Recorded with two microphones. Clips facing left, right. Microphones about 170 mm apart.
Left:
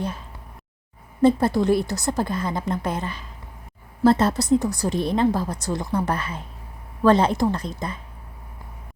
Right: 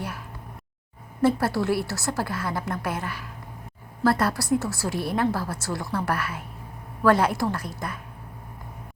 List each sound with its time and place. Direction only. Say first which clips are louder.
1.2 s a woman's voice: left 4 dB; 20° left (ahead or behind)